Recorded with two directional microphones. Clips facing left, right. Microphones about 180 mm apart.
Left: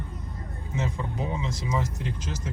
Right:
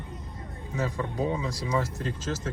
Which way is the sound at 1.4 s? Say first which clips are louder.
Right 1 dB; 20° left (ahead or behind).